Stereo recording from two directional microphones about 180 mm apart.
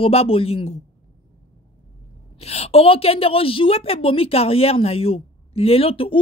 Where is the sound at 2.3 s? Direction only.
35° left (ahead or behind).